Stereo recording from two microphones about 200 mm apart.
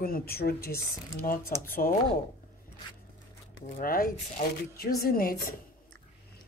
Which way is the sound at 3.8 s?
45° left (ahead or behind).